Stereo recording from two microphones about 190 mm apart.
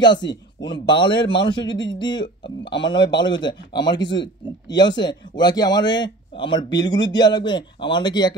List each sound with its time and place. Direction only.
0.0 s speech: 25° left (ahead or behind)